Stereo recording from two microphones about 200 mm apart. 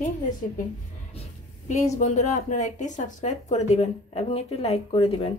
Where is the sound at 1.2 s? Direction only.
35° left (ahead or behind).